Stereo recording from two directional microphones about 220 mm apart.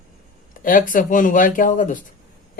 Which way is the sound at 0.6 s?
40° left (ahead or behind).